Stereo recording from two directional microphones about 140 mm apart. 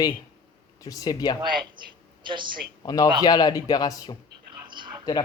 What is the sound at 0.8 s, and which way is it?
Speech, 25° left (ahead or behind).